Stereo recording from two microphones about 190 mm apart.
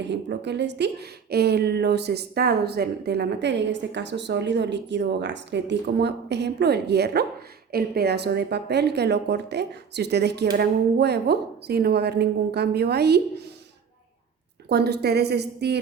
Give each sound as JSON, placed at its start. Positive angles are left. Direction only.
{"t": 0.0, "sound": "speech", "side_deg": -65}
{"t": 14.7, "sound": "speech", "side_deg": -60}